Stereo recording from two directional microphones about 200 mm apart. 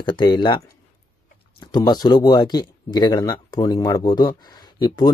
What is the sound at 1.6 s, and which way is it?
Speech, 20° left (ahead or behind).